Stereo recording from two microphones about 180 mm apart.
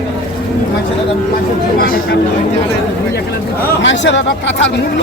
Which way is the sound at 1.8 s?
55° left (ahead or behind).